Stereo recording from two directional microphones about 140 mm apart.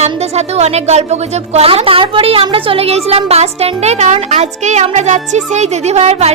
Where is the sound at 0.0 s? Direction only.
50° right (ahead or behind).